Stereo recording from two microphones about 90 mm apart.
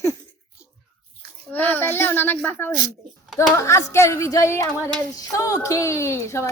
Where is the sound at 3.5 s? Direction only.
35° left (ahead or behind).